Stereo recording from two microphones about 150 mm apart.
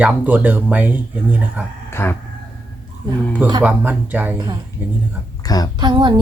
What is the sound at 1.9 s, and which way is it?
Speech, 15° left (ahead or behind).